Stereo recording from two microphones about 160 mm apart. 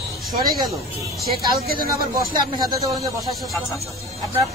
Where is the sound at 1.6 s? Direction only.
70° right (ahead or behind).